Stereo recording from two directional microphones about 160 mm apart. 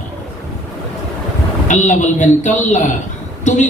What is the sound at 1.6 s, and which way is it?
A man's voice, 50° left (ahead or behind).